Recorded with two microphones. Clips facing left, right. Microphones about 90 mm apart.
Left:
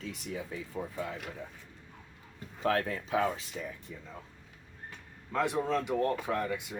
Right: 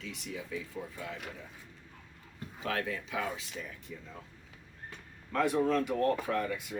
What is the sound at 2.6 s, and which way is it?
Speech, 40° left (ahead or behind).